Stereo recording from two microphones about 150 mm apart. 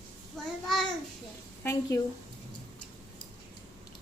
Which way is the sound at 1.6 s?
15° left (ahead or behind).